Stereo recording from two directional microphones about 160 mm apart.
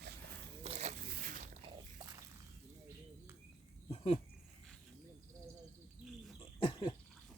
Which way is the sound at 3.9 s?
40° left (ahead or behind).